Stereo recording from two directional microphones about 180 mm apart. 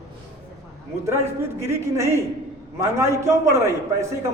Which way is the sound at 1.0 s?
15° right (ahead or behind).